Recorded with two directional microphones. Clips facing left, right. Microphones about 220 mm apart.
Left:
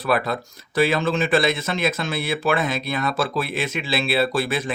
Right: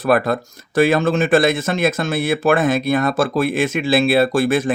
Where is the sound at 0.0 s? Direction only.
50° right (ahead or behind).